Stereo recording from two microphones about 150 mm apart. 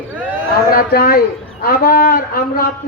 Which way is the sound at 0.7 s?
85° left.